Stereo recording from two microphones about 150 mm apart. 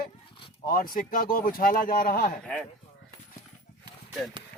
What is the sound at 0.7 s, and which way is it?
Speech, 70° left (ahead or behind).